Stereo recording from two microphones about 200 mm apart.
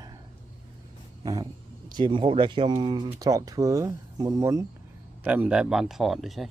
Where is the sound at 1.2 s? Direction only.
20° right (ahead or behind).